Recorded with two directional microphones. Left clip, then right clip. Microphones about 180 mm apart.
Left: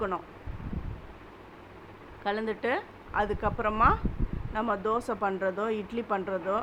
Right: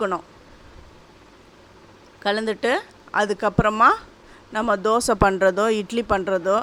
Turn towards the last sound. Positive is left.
turn(degrees=-45)  # may be behind; listen again after turning